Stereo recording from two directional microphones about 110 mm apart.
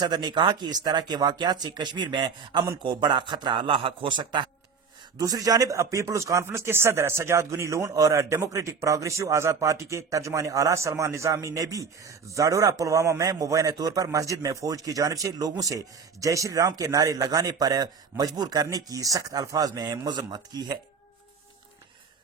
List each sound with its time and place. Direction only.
0.0 s a man's voice: 40° right (ahead or behind)
5.1 s speech: 35° right (ahead or behind)